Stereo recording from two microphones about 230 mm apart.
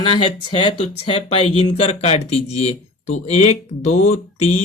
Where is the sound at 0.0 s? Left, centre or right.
Left.